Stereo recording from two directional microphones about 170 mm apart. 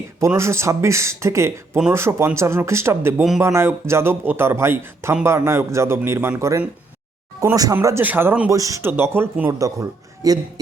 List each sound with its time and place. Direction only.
0.2 s speech: 15° right (ahead or behind)